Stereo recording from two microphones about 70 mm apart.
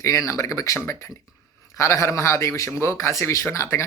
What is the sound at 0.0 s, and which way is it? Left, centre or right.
A man's voice, left.